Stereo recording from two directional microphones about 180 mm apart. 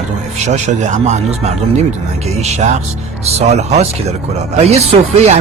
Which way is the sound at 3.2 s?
40° right (ahead or behind).